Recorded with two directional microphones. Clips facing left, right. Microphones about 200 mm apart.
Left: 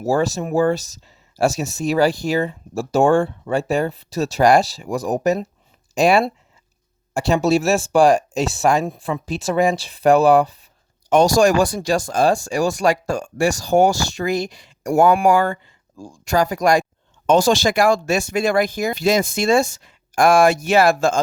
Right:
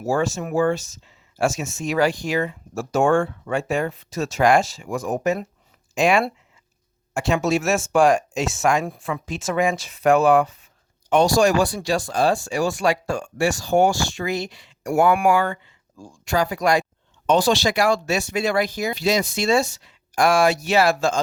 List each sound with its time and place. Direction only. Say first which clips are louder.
0.0 s speech: left 3 dB; 35° left (ahead or behind)